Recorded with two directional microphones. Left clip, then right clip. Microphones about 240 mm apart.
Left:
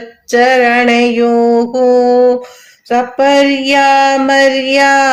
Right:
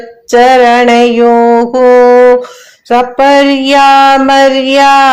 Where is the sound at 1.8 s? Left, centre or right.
Centre.